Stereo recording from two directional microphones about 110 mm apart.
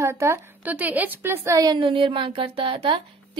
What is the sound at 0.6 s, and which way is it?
Speech, 15° right (ahead or behind).